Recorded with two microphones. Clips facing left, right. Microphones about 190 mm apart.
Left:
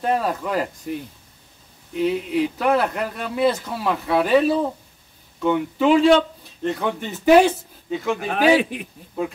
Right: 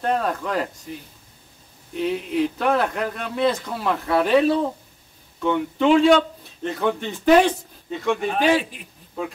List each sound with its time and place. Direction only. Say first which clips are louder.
0.0 s a man's voice: left 1 dB; 5° left (ahead or behind)
0.9 s a man's voice: left 7 dB; 60° left (ahead or behind)
2.0 s a man's voice: left 2 dB; centre (ahead or behind)
8.7 s a man's voice: left 11 dB; 65° left (ahead or behind)